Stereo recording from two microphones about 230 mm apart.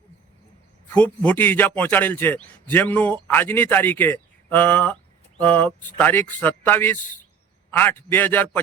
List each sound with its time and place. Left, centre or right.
0.9 s a man's voice: centre